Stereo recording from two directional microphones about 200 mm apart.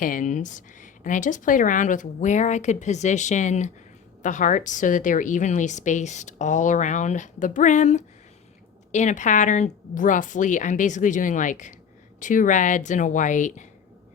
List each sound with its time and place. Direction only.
0.0 s a woman's voice: 40° left (ahead or behind)